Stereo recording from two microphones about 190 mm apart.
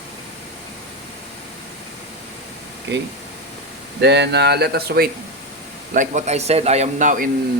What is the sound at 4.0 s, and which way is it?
Speech, 65° right (ahead or behind).